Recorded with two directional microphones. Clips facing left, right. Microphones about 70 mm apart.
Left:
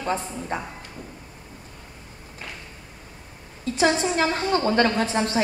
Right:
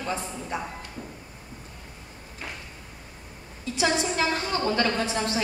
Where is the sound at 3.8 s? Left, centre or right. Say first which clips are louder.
Left 4 dB; left.